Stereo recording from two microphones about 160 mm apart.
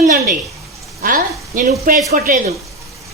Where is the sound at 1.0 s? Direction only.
60° right (ahead or behind).